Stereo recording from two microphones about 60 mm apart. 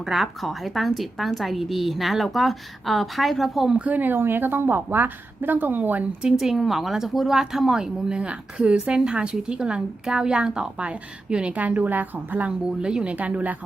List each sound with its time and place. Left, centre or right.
0.0 s speech: centre
3.8 s a woman's voice: right
6.2 s speech: centre; by 12.5 s right
12.8 s speech: centre
13.1 s speech: right